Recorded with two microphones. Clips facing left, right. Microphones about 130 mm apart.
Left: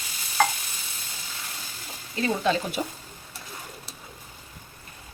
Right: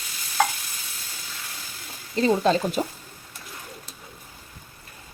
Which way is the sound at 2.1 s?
40° right (ahead or behind).